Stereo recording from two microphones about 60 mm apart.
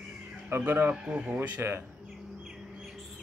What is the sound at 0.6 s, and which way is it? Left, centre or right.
Speech, right.